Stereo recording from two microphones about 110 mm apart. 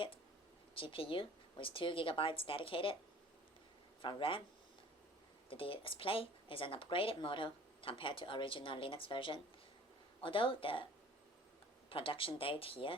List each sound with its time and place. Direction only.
0.7 s speech: 55° left (ahead or behind)
4.0 s speech: 50° left (ahead or behind)
5.5 s speech: 55° left (ahead or behind)
11.9 s speech: 55° left (ahead or behind)